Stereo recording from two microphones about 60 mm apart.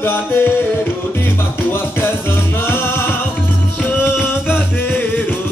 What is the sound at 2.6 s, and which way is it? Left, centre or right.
Music, left.